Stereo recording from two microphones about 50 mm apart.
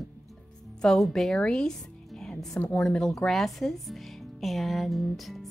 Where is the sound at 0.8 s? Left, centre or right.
Centre.